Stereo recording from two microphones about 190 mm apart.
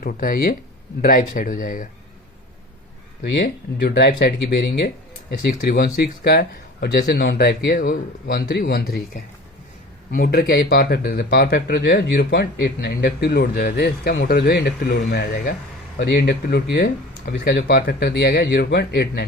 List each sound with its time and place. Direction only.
0.0 s speech: 50° left (ahead or behind)
3.2 s speech: 65° left (ahead or behind)
10.1 s speech: 50° left (ahead or behind)